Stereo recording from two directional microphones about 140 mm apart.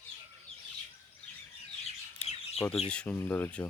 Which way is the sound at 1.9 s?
50° left (ahead or behind).